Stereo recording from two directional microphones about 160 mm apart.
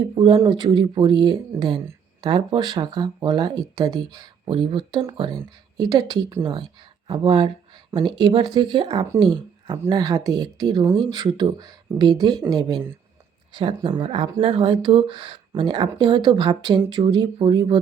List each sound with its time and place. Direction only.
0.2 s a woman's voice: 30° right (ahead or behind)
9.7 s speech: 20° right (ahead or behind)